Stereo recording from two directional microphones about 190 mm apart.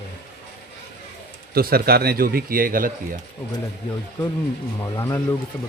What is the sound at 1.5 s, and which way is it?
Speech, 55° right (ahead or behind).